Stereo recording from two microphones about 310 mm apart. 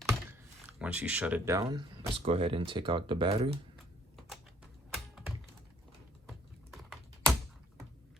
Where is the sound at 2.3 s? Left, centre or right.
Centre.